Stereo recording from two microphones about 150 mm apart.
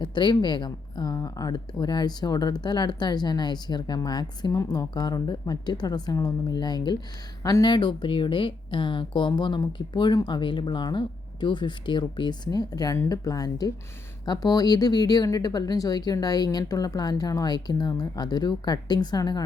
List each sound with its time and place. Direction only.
0.0 s a woman's voice: 30° left (ahead or behind)